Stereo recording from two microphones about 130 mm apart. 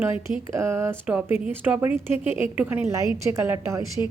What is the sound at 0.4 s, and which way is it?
A woman's voice, 20° right (ahead or behind).